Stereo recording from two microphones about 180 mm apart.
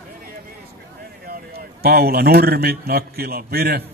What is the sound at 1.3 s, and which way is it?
A man's voice, 60° right (ahead or behind).